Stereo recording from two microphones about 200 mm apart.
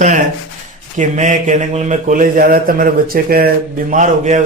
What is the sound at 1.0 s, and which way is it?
Speech, 40° right (ahead or behind).